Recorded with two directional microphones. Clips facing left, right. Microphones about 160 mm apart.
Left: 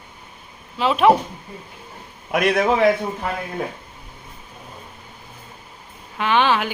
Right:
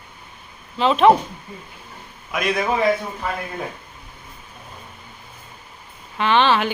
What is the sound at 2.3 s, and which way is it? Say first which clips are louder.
Speech: left 4 dB; 70° left (ahead or behind).